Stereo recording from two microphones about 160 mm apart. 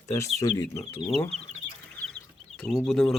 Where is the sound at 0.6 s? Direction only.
15° left (ahead or behind).